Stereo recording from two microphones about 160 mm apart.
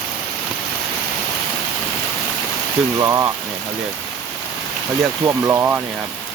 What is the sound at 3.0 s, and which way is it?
Speech, 20° right (ahead or behind).